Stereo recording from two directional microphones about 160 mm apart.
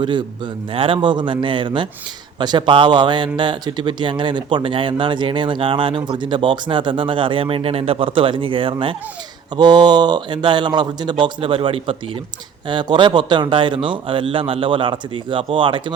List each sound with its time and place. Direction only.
0.0 s a man's voice: 30° right (ahead or behind)